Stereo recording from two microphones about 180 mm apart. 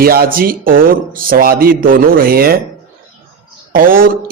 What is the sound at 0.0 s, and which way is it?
A man's voice, 55° right (ahead or behind).